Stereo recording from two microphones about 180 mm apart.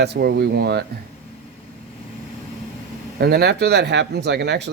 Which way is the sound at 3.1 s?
65° right (ahead or behind).